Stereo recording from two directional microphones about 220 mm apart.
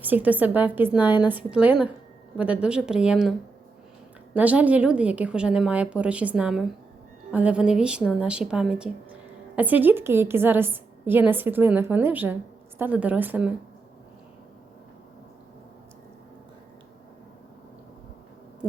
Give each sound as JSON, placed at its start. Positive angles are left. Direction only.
{"t": 0.0, "sound": "a woman's voice", "side_deg": -5}
{"t": 4.4, "sound": "a woman's voice", "side_deg": -5}